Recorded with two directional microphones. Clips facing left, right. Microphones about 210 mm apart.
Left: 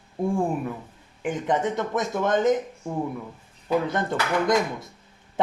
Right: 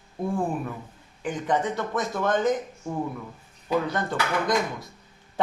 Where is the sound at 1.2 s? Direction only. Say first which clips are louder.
Left 1 dB; 20° left (ahead or behind).